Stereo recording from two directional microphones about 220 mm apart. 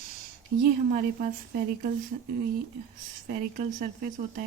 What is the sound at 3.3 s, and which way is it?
Speech, 40° right (ahead or behind).